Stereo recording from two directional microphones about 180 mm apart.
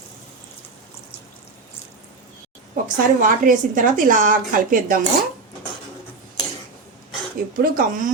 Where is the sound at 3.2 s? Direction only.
50° right (ahead or behind).